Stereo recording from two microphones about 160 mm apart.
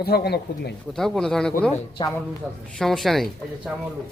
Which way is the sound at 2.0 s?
25° left (ahead or behind).